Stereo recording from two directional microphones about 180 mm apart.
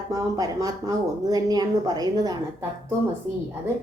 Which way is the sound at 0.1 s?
20° right (ahead or behind).